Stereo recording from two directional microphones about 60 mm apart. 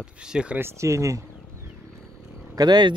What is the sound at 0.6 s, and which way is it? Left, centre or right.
Speech, right.